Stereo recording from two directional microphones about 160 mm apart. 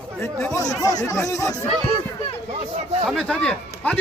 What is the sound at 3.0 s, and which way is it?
Speech, 5° left (ahead or behind).